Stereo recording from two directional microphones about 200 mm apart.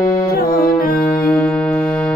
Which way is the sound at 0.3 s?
45° left (ahead or behind).